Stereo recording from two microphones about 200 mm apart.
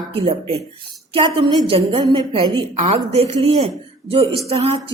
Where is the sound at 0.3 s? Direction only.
30° right (ahead or behind).